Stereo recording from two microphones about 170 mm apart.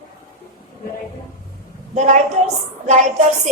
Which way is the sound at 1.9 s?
45° right (ahead or behind).